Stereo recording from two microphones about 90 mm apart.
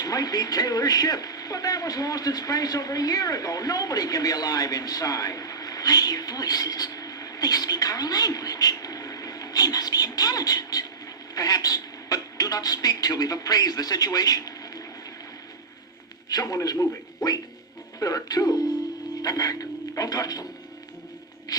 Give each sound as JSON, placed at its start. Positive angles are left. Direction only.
{"t": 0.0, "sound": "speech", "side_deg": 45}
{"t": 16.3, "sound": "a man's voice", "side_deg": 40}
{"t": 18.0, "sound": "speech", "side_deg": 45}